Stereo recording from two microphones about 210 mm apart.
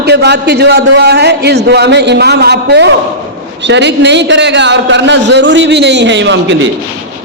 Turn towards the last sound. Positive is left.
turn(degrees=-60)  # may be behind; listen again after turning